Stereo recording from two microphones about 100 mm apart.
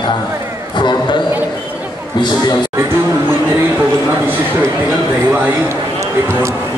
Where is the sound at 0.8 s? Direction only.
50° left (ahead or behind).